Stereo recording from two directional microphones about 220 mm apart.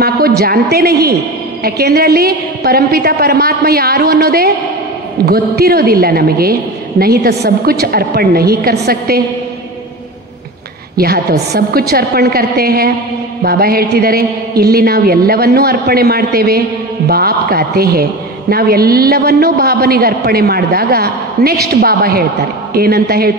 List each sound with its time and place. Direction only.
0.4 s a man's voice: 45° right (ahead or behind)
11.0 s a man's voice: 45° right (ahead or behind)